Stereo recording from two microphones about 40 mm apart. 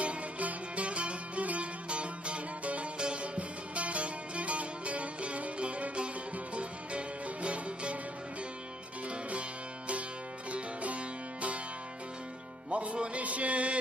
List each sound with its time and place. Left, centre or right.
0.0 s music: right
10.5 s music: right
12.7 s music: right